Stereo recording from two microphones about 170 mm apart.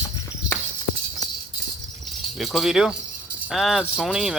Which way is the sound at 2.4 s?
Centre (ahead or behind).